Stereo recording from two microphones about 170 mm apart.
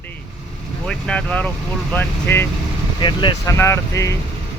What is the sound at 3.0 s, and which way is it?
Speech, 25° left (ahead or behind).